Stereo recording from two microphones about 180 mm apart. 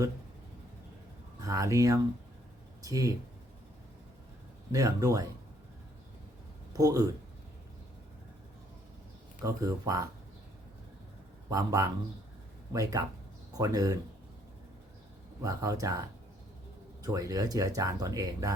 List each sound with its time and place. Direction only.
1.4 s speech: 15° right (ahead or behind)
4.7 s speech: 20° right (ahead or behind)
6.7 s speech: 20° right (ahead or behind)
9.4 s speech: 20° right (ahead or behind)
11.4 s speech: 20° right (ahead or behind)
15.4 s speech: 20° right (ahead or behind)